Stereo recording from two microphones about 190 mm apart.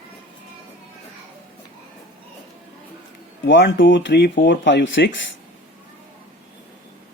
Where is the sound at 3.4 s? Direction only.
70° left (ahead or behind).